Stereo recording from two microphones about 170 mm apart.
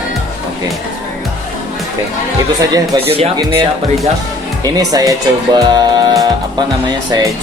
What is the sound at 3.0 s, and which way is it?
Speech, 35° right (ahead or behind).